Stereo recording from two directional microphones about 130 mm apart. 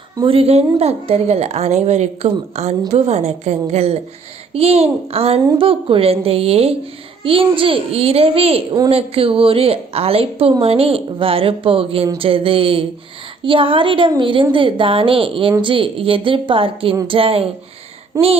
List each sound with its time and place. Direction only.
0.3 s a woman's voice: 50° right (ahead or behind)
18.1 s speech: 25° right (ahead or behind)